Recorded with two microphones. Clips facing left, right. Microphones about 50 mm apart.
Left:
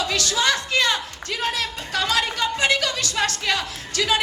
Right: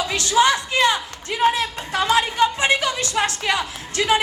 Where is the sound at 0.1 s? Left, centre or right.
Right.